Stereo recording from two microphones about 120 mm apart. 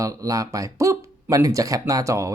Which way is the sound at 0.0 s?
30° right (ahead or behind).